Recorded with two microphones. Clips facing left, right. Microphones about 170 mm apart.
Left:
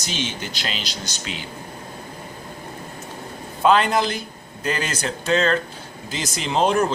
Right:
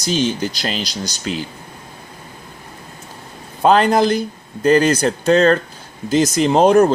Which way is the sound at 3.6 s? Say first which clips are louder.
Right 5 dB; 40° right (ahead or behind).